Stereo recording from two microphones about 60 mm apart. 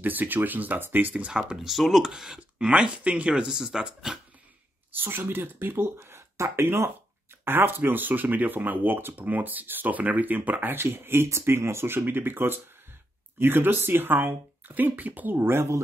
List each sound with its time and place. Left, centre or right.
0.0 s speech: right
1.5 s speech: centre
4.9 s speech: right
15.3 s speech: right